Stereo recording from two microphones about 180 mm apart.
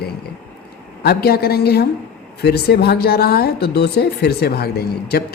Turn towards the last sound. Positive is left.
turn(degrees=60)  # may be behind; listen again after turning